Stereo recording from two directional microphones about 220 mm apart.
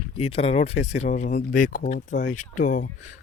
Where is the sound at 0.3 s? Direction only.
25° left (ahead or behind).